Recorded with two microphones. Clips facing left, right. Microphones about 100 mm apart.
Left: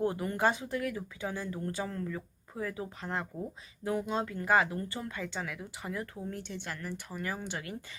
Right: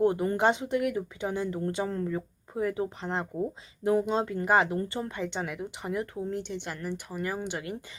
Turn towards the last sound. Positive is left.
turn(degrees=-20)  # may be behind; listen again after turning